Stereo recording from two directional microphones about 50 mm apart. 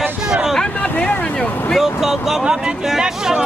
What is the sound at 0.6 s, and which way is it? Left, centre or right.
Speech, left.